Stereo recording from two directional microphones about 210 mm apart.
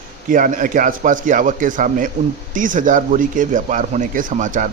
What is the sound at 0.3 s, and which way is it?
A man's voice, 40° right (ahead or behind).